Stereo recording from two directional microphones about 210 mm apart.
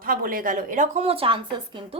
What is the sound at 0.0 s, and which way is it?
A woman's voice, 45° right (ahead or behind).